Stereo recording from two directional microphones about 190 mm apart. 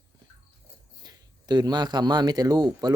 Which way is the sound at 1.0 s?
20° right (ahead or behind).